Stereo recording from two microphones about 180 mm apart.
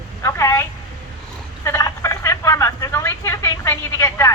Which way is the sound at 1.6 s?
15° left (ahead or behind).